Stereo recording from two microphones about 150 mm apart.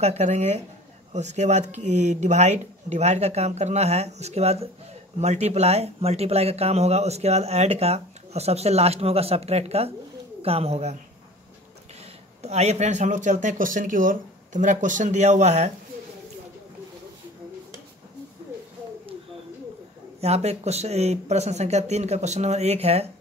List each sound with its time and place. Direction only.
0.0 s speech: 45° right (ahead or behind)
12.4 s speech: 45° right (ahead or behind)
20.2 s speech: 45° right (ahead or behind)